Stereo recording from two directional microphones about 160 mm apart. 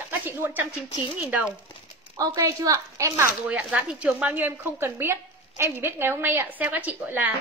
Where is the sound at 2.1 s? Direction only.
20° right (ahead or behind).